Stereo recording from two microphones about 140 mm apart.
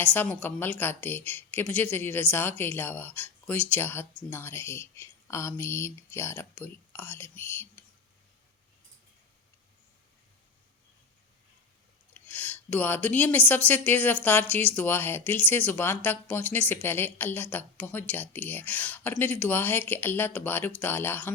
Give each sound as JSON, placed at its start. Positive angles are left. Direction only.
{"t": 0.0, "sound": "speech", "side_deg": 15}
{"t": 12.3, "sound": "speech", "side_deg": 15}